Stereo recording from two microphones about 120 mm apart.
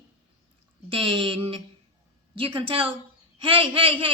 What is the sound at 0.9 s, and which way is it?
A woman's voice, 50° right (ahead or behind).